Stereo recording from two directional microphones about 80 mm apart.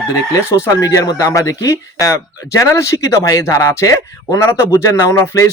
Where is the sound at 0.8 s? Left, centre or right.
Left.